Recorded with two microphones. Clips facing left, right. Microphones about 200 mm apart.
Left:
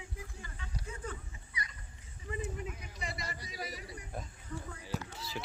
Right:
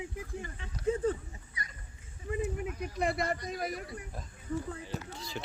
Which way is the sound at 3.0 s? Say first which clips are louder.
Right 14 dB; 55° right (ahead or behind).